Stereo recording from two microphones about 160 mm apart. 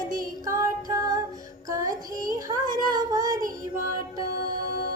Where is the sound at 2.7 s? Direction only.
25° right (ahead or behind).